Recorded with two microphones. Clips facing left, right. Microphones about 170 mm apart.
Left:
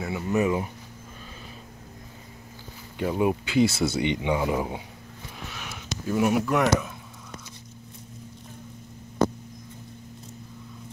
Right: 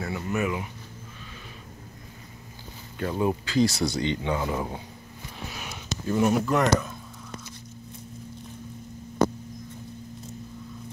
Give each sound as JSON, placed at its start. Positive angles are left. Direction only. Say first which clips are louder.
{"t": 0.0, "sound": "a sound", "louder": "left 3 dB", "side_deg": 20}
{"t": 3.0, "sound": "speech", "louder": "left 2 dB", "side_deg": 15}
{"t": 3.7, "sound": "speech", "louder": "left 2 dB", "side_deg": 5}
{"t": 4.0, "sound": "speech", "louder": "left 2 dB", "side_deg": 15}
{"t": 5.5, "sound": "a sound", "louder": "right 1 dB", "side_deg": -5}
{"t": 6.0, "sound": "speech", "louder": "even", "side_deg": 5}